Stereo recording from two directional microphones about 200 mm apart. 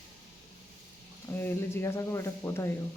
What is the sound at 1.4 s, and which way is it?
Speech, 10° left (ahead or behind).